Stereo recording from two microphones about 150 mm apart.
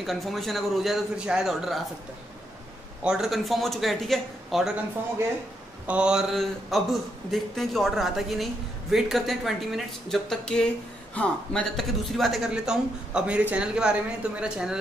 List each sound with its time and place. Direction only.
0.0 s speech: centre (ahead or behind)
3.0 s speech: 5° right (ahead or behind)
5.9 s speech: 5° right (ahead or behind)